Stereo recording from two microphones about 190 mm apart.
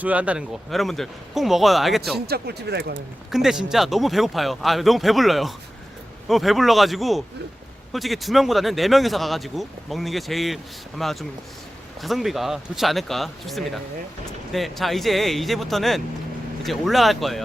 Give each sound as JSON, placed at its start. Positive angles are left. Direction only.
{"t": 0.0, "sound": "speech", "side_deg": -5}
{"t": 2.2, "sound": "speech", "side_deg": -55}
{"t": 3.3, "sound": "speech", "side_deg": 0}